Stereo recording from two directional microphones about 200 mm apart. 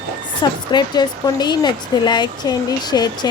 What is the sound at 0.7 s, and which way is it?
Speech, 20° left (ahead or behind).